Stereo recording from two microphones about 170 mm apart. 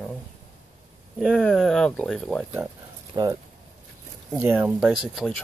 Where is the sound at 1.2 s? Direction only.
5° left (ahead or behind).